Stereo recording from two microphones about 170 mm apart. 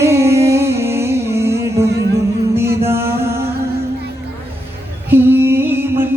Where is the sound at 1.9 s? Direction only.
75° right (ahead or behind).